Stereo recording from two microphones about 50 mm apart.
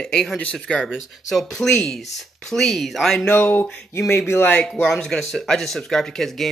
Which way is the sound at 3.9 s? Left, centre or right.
Left.